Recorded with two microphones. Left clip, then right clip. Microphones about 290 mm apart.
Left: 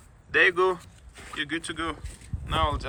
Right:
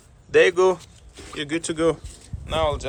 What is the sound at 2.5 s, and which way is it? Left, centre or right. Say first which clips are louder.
Speech: right 4 dB; centre.